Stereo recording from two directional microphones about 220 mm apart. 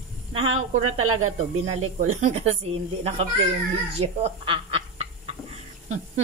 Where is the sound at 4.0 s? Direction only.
25° right (ahead or behind).